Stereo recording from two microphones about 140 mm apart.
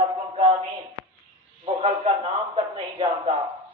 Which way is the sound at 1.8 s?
45° right (ahead or behind).